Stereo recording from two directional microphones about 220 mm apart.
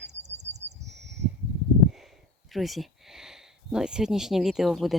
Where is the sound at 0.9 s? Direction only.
50° right (ahead or behind).